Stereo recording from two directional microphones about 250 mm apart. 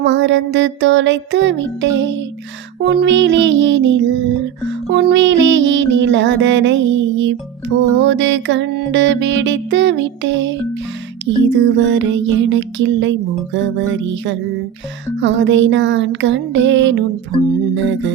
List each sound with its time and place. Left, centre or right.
0.0 s music: right